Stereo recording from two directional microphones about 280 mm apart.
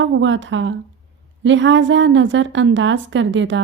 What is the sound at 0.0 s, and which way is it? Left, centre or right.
Speech, right.